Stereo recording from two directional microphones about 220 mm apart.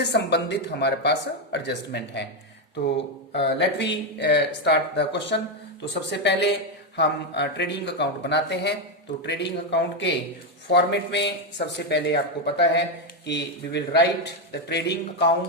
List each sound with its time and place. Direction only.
0.0 s speech: 50° left (ahead or behind)
3.3 s speech: 50° left (ahead or behind)